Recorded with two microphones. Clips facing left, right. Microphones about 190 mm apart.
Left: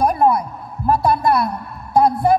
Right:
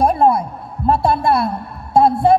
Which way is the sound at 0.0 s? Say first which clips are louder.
Right 2 dB; 30° right (ahead or behind).